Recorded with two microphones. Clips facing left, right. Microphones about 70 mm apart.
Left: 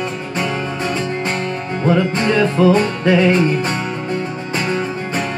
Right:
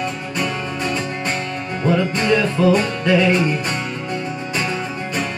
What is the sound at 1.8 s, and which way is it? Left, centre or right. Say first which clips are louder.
Music: left 2 dB; left.